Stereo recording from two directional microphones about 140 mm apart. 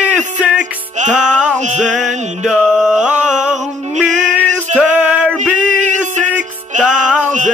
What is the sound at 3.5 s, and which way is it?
Music, 60° right (ahead or behind).